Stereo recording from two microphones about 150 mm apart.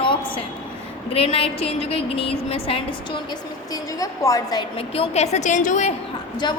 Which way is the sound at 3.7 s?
25° left (ahead or behind).